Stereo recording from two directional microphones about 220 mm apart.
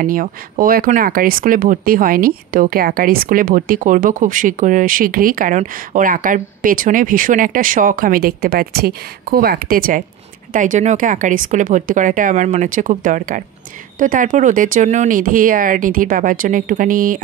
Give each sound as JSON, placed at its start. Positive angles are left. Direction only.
{"t": 0.0, "sound": "speech", "side_deg": -40}